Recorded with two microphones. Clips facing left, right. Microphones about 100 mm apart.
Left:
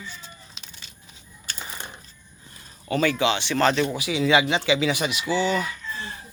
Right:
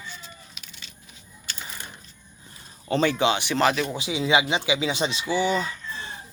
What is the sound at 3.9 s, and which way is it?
Speech, 20° right (ahead or behind).